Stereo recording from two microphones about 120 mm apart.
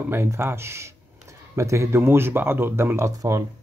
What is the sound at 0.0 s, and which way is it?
Speech, 20° right (ahead or behind).